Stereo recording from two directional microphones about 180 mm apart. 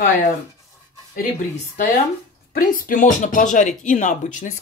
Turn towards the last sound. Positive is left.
turn(degrees=45)  # may be behind; listen again after turning